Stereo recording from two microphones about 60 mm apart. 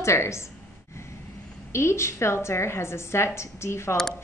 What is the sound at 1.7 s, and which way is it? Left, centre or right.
A woman's voice, left.